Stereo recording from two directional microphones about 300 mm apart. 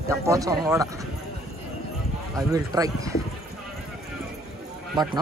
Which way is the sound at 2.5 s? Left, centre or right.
Centre.